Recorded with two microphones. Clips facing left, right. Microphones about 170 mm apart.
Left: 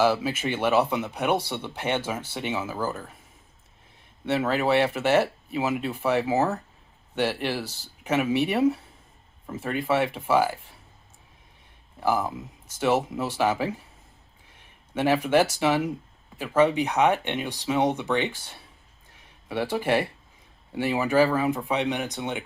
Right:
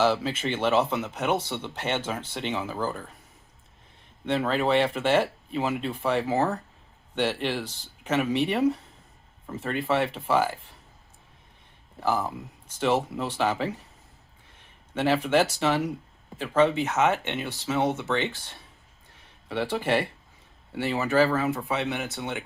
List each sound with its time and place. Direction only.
0.0 s speech: 10° left (ahead or behind)
4.3 s speech: 10° left (ahead or behind)
11.9 s speech: 10° left (ahead or behind)
19.1 s a sound: 10° left (ahead or behind)
20.7 s speech: 10° left (ahead or behind)